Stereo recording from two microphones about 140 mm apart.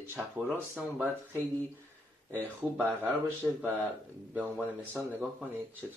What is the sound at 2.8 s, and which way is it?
Speech, 15° right (ahead or behind).